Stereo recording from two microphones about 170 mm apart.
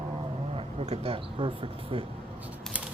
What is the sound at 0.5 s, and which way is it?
Speech, 35° right (ahead or behind).